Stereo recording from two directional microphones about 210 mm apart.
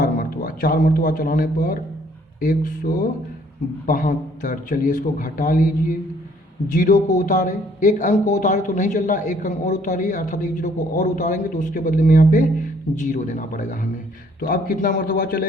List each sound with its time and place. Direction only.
0.0 s a man's voice: 40° left (ahead or behind)